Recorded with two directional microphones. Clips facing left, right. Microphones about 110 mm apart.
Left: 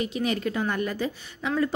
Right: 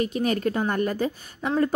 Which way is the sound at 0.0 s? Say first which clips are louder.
Right 3 dB; 45° right (ahead or behind).